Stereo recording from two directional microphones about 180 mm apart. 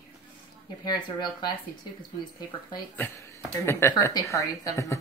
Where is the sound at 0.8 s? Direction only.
25° left (ahead or behind).